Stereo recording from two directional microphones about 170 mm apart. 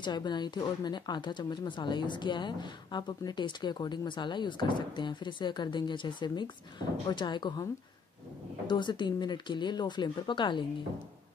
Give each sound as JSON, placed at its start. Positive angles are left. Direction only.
{"t": 0.0, "sound": "speech", "side_deg": 25}
{"t": 8.6, "sound": "speech", "side_deg": 25}